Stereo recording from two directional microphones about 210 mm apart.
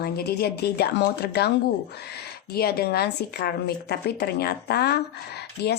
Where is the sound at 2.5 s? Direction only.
50° left (ahead or behind).